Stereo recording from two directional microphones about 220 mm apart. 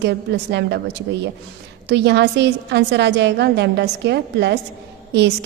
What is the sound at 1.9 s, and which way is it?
A woman's voice, 50° right (ahead or behind).